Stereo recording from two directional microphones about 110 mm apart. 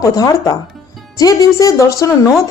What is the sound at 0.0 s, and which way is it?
Speech, 30° left (ahead or behind).